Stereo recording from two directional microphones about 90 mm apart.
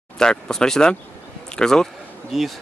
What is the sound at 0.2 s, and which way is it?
Speech, 5° left (ahead or behind).